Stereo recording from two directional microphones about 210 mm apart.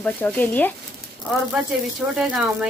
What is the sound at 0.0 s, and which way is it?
Speech, 5° left (ahead or behind).